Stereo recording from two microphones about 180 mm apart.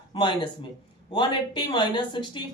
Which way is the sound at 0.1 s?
25° left (ahead or behind).